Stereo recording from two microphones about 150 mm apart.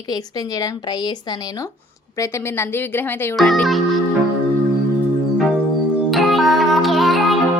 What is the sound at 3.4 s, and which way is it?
Speech, centre (ahead or behind).